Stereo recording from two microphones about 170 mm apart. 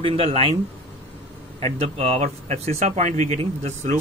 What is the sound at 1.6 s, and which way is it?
Speech, 40° right (ahead or behind).